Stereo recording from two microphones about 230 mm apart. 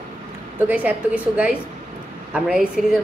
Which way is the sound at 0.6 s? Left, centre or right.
Centre.